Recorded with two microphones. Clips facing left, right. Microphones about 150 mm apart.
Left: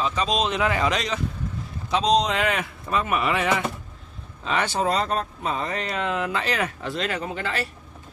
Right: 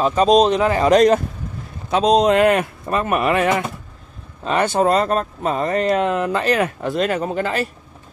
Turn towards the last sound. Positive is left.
turn(degrees=-45)  # may be behind; listen again after turning